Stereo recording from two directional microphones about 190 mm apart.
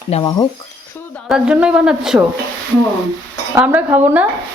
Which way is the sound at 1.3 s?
5° right (ahead or behind).